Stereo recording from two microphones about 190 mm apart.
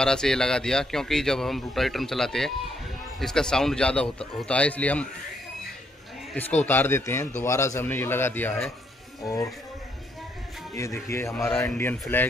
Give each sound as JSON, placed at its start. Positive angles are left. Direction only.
{"t": 0.0, "sound": "a man's voice", "side_deg": 5}
{"t": 6.6, "sound": "a man's voice", "side_deg": 10}
{"t": 9.2, "sound": "a man's voice", "side_deg": 15}
{"t": 10.8, "sound": "a man's voice", "side_deg": 15}